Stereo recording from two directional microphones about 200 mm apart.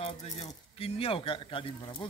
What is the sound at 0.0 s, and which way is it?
Speech, 30° left (ahead or behind).